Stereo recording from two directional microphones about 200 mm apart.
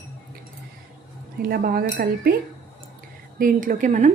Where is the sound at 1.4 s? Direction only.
50° right (ahead or behind).